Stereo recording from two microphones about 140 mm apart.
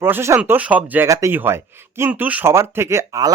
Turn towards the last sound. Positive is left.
turn(degrees=-20)  # may be behind; listen again after turning